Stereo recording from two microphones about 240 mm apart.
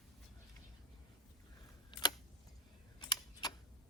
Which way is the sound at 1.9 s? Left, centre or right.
Centre.